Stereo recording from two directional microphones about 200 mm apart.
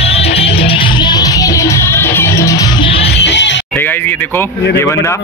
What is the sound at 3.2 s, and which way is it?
Music, 60° left (ahead or behind).